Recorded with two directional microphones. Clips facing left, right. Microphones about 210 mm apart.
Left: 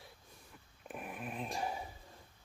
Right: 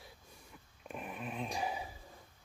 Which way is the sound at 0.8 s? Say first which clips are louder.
Right 1 dB; 5° left (ahead or behind).